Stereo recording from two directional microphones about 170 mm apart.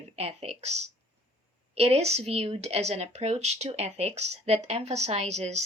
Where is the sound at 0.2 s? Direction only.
40° right (ahead or behind).